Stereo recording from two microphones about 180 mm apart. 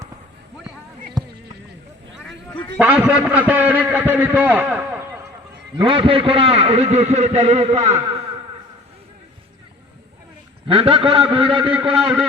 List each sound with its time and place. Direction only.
1.2 s clip-clop: 25° right (ahead or behind)
2.7 s a man's voice: 5° right (ahead or behind)
5.8 s a man's voice: 30° right (ahead or behind)
10.7 s a man's voice: 30° right (ahead or behind)